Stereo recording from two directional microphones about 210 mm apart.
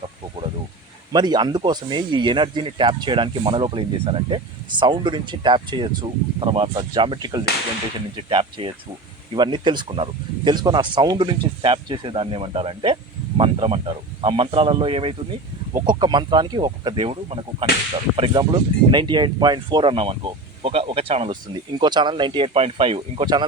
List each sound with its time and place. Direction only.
1.1 s speech: 20° right (ahead or behind)